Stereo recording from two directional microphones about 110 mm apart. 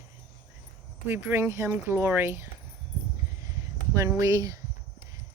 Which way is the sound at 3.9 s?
30° right (ahead or behind).